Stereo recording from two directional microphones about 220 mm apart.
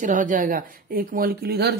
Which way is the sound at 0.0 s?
35° right (ahead or behind).